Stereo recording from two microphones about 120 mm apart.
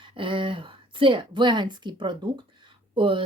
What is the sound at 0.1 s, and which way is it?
A woman's voice, 45° right (ahead or behind).